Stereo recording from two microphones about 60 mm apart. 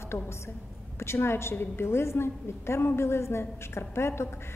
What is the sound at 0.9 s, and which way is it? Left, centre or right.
A woman's voice, left.